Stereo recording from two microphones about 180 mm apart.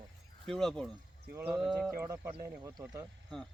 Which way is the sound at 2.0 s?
15° right (ahead or behind).